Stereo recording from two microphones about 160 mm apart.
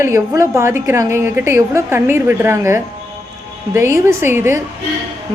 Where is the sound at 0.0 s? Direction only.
20° right (ahead or behind).